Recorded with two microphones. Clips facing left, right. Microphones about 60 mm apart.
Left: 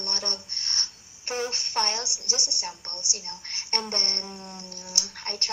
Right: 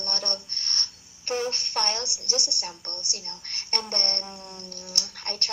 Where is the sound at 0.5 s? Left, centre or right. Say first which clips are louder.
Right 1 dB; left.